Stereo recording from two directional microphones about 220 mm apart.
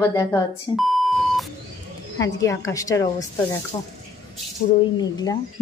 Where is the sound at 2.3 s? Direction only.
15° left (ahead or behind).